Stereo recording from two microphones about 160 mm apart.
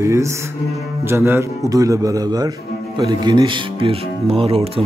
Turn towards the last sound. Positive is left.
turn(degrees=-35)  # may be behind; listen again after turning